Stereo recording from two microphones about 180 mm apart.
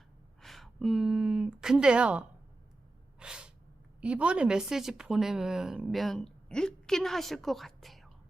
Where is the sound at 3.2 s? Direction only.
5° right (ahead or behind).